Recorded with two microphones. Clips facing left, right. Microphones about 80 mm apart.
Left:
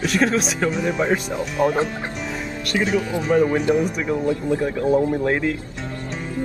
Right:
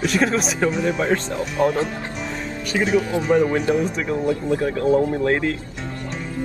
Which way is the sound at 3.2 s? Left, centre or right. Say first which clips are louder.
Even; centre.